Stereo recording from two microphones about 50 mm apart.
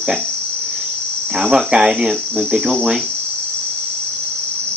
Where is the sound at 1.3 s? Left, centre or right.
Centre.